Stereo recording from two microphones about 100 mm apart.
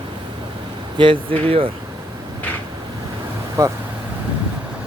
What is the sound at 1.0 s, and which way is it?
Speech, 65° right (ahead or behind).